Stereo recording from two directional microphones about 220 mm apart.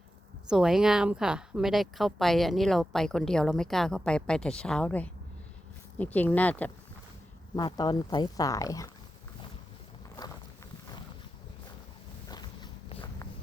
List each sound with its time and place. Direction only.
0.4 s speech: centre (ahead or behind)
7.5 s speech: 20° left (ahead or behind)
12.3 s walk: 20° left (ahead or behind)